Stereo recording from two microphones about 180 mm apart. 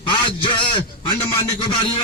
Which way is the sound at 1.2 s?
30° left (ahead or behind).